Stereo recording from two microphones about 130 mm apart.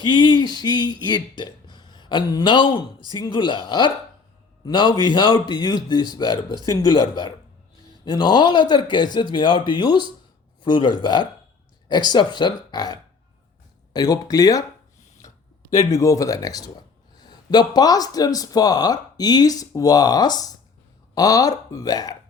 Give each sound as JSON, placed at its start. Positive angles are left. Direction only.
{"t": 0.0, "sound": "speech", "side_deg": 35}
{"t": 15.7, "sound": "speech", "side_deg": 25}